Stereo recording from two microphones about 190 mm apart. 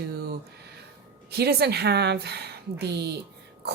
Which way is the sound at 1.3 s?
60° right (ahead or behind).